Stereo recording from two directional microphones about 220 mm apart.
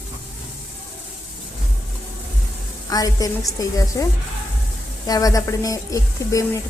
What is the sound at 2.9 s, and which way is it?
A woman's voice, 15° left (ahead or behind).